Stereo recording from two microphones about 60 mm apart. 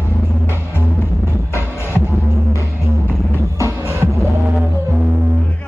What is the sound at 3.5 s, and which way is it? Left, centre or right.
Music, right.